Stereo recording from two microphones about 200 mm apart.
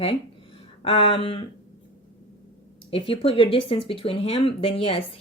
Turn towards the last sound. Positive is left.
turn(degrees=25)  # may be behind; listen again after turning